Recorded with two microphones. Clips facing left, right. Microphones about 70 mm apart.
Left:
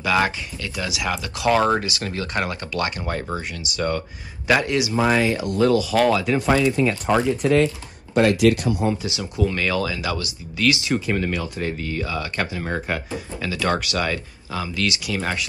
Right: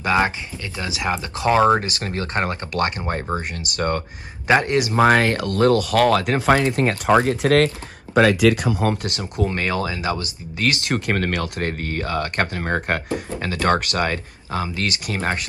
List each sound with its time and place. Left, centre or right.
0.0 s speech: right
1.8 s speech: right
3.3 s speech: right
7.2 s speech: right
8.8 s speech: right
9.2 s speech: right